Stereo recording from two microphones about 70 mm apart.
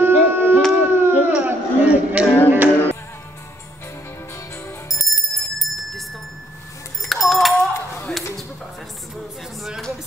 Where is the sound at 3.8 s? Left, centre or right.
Left.